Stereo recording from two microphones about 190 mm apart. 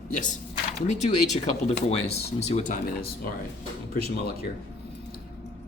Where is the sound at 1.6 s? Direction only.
35° left (ahead or behind).